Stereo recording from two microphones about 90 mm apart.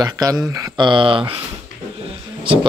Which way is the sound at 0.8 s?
65° right (ahead or behind).